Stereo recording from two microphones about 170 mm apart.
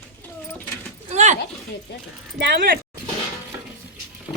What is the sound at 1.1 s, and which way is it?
Speech, 45° right (ahead or behind).